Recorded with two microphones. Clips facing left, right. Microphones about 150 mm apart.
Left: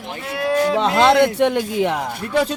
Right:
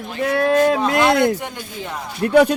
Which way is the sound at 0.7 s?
75° left (ahead or behind).